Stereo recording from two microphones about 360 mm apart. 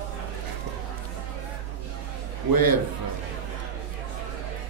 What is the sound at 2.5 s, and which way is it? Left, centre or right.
Speech, right.